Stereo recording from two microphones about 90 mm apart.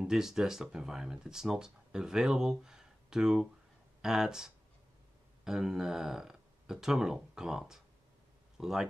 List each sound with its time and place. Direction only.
0.0 s speech: 5° right (ahead or behind)